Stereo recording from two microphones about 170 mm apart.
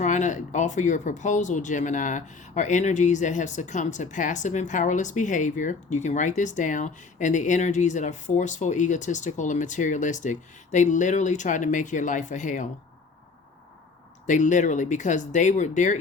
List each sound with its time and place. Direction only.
0.0 s speech: 45° left (ahead or behind)
14.3 s speech: 45° left (ahead or behind)